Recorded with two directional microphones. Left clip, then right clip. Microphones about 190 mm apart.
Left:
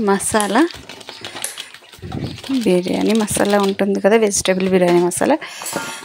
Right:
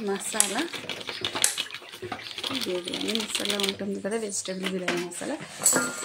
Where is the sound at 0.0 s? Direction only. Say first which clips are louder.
Left 12 dB; 55° left (ahead or behind).